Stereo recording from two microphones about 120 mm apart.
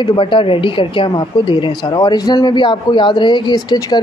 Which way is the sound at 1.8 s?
30° left (ahead or behind).